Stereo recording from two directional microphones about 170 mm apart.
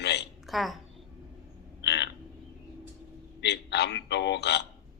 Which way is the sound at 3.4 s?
80° left.